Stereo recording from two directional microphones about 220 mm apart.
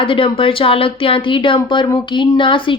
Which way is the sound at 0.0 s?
25° left (ahead or behind).